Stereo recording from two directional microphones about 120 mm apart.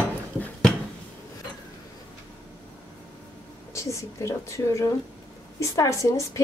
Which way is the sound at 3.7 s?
25° left (ahead or behind).